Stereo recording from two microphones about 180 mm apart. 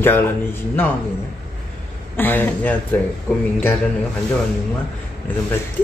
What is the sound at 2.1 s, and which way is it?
Speech, 10° left (ahead or behind).